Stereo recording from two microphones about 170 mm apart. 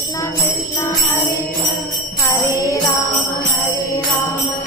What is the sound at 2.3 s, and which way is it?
Jingle bell, 15° left (ahead or behind).